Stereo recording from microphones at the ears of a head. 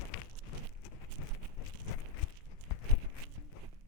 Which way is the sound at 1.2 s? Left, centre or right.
Left.